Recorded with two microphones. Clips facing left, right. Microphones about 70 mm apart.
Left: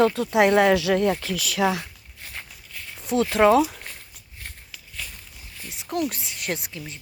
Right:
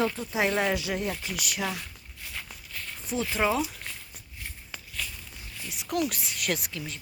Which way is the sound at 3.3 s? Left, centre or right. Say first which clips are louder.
Left 10 dB; left.